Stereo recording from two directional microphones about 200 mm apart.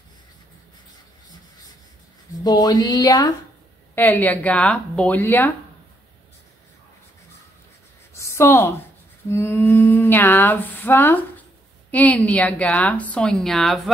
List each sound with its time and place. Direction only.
2.3 s speech: 20° left (ahead or behind)
8.1 s a sound: 15° left (ahead or behind)
9.3 s speech: 10° left (ahead or behind)